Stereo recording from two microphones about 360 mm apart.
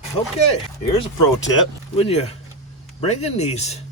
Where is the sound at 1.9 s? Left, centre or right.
Centre.